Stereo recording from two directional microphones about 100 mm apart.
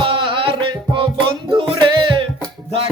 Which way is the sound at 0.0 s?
55° right (ahead or behind).